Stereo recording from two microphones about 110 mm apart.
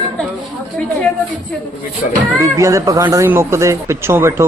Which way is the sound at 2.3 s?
30° right (ahead or behind).